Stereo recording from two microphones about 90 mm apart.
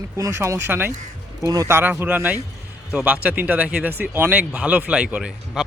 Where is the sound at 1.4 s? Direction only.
40° right (ahead or behind).